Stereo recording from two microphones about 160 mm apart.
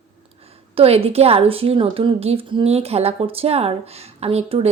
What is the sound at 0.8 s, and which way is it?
A woman's voice, 40° right (ahead or behind).